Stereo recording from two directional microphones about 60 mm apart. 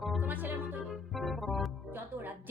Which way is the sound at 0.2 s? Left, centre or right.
Right.